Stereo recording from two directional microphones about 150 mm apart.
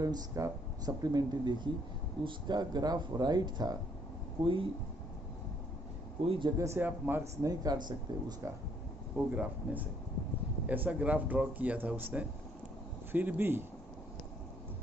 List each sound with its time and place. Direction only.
0.0 s speech: 25° right (ahead or behind)
6.2 s speech: 40° right (ahead or behind)
6.6 s speech: 15° right (ahead or behind)
7.6 s speech: 25° right (ahead or behind)
9.1 s speech: 10° right (ahead or behind)